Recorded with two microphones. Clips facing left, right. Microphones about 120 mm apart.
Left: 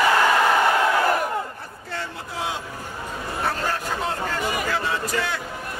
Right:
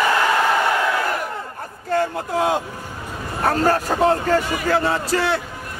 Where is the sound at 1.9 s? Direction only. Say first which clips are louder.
Right 12 dB; 50° right (ahead or behind).